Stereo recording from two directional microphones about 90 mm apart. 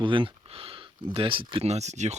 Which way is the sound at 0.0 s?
70° right (ahead or behind).